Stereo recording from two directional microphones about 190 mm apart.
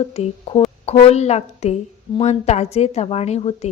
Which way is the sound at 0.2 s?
30° left (ahead or behind).